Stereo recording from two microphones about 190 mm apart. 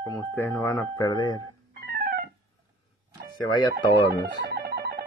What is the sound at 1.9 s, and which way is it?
Music, 55° right (ahead or behind).